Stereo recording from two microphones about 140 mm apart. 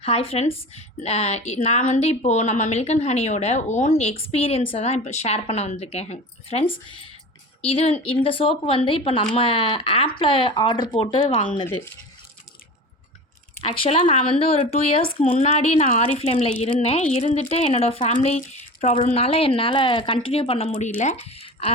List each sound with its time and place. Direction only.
0.0 s a woman's voice: 45° left (ahead or behind)
13.6 s a woman's voice: 45° left (ahead or behind)